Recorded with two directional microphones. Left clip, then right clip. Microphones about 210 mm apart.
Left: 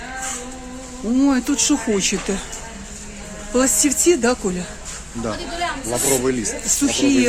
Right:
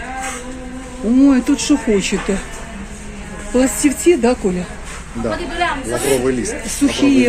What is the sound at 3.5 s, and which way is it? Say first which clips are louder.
Speech: right 3 dB; centre (ahead or behind).